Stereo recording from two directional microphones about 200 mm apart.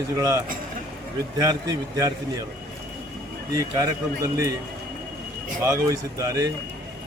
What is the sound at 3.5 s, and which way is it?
Speech, 15° right (ahead or behind).